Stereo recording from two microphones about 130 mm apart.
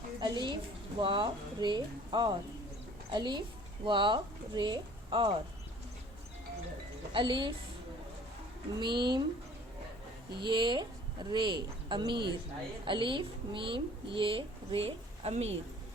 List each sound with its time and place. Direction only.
0.2 s a woman's voice: 35° right (ahead or behind)
7.1 s a woman's voice: 40° right (ahead or behind)
8.8 s a woman's voice: 35° right (ahead or behind)
10.4 s a woman's voice: 35° right (ahead or behind); by 15.5 s 55° right (ahead or behind)